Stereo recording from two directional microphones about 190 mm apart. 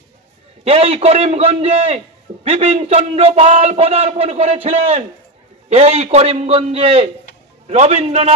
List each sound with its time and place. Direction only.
0.7 s a man's voice: 30° right (ahead or behind)